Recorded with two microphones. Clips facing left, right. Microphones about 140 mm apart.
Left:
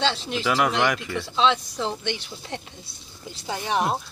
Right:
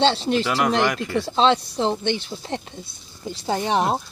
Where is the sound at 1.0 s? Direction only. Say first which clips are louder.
Right 4 dB; 35° right (ahead or behind).